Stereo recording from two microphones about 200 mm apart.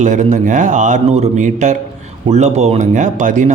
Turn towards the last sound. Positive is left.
turn(degrees=-40)  # may be behind; listen again after turning